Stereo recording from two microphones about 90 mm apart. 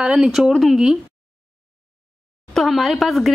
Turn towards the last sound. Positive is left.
turn(degrees=0)  # may be behind; listen again after turning